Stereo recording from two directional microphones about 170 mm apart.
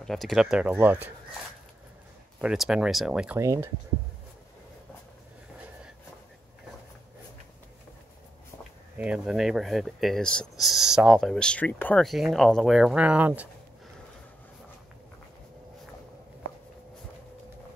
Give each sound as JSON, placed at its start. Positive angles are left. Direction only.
{"t": 0.0, "sound": "speech", "side_deg": 0}
{"t": 2.4, "sound": "speech", "side_deg": 0}
{"t": 3.3, "sound": "speech", "side_deg": -15}
{"t": 8.9, "sound": "speech", "side_deg": -5}